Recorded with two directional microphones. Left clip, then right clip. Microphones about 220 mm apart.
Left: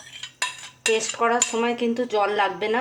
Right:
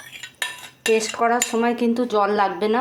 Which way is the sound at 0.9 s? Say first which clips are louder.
Right 3 dB; 25° right (ahead or behind).